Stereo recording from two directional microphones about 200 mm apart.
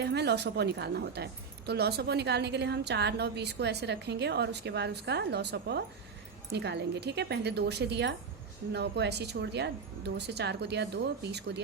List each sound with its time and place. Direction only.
0.0 s a woman's voice: 55° right (ahead or behind)